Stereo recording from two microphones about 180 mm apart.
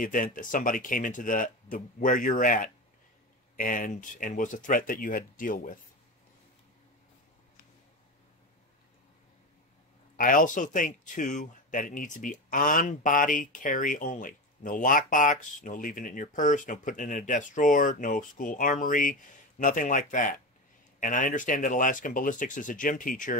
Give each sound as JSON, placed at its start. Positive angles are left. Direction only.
{"t": 0.0, "sound": "speech", "side_deg": 50}
{"t": 10.1, "sound": "speech", "side_deg": 50}